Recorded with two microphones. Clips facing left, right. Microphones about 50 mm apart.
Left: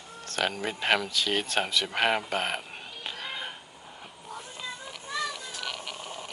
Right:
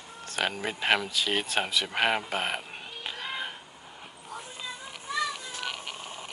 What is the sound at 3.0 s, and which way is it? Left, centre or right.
Music, centre.